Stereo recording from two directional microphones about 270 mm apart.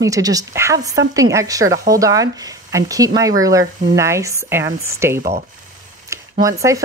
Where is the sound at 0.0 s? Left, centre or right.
Centre.